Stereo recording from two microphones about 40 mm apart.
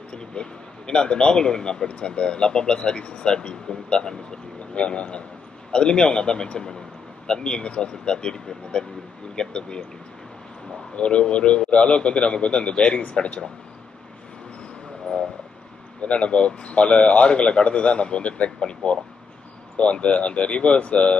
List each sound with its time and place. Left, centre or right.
0.1 s speech: left
11.0 s a man's voice: left
15.1 s vehicle: left
16.0 s a man's voice: left